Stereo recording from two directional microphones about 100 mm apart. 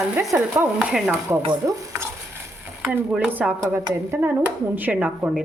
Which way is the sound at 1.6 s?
30° right (ahead or behind).